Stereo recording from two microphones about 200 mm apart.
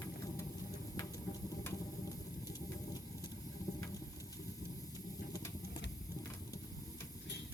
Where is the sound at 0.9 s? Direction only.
15° left (ahead or behind).